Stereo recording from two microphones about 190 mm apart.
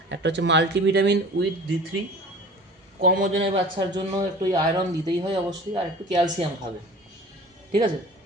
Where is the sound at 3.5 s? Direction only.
25° right (ahead or behind).